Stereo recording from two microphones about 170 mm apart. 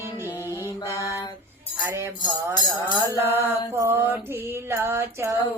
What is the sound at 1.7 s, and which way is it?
Music, 10° right (ahead or behind).